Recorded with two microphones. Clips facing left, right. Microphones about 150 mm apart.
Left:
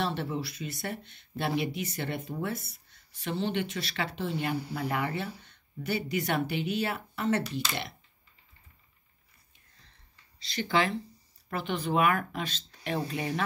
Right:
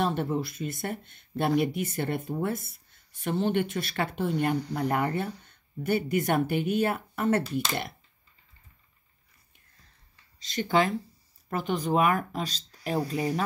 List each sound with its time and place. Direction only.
0.0 s speech: 45° right (ahead or behind)
10.4 s speech: 45° right (ahead or behind)